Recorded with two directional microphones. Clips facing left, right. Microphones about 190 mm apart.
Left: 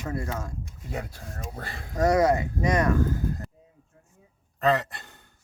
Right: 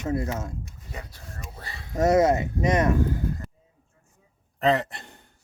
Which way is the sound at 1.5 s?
50° left (ahead or behind).